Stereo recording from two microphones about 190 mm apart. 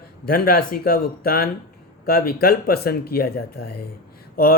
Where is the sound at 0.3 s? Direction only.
50° left (ahead or behind).